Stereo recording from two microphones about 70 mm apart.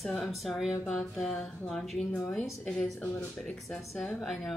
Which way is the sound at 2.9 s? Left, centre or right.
Left.